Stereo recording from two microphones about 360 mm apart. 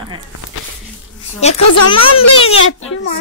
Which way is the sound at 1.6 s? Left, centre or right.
Left.